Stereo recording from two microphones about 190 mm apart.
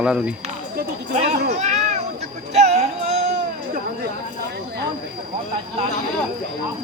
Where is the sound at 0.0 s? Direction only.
5° right (ahead or behind).